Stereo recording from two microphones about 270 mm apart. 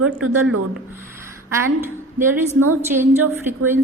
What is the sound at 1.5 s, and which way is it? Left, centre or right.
A woman's voice, centre.